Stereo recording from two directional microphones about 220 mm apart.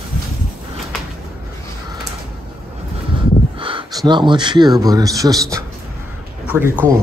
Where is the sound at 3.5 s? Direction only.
20° right (ahead or behind).